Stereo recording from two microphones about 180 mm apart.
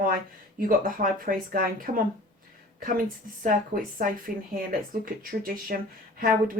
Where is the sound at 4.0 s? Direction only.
50° right (ahead or behind).